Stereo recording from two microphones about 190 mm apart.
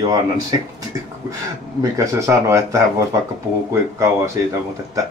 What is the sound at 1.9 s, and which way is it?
Speech, 15° right (ahead or behind).